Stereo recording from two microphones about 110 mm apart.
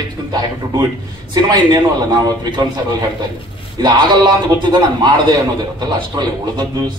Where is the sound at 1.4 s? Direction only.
40° right (ahead or behind).